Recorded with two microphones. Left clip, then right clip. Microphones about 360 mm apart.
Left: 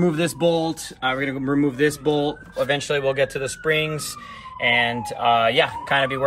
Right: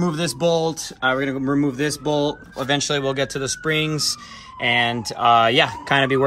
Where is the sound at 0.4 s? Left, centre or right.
Centre.